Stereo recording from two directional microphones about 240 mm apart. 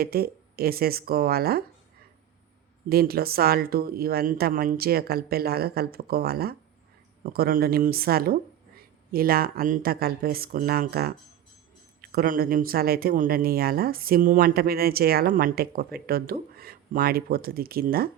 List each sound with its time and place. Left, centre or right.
0.0 s speech: right
2.9 s speech: right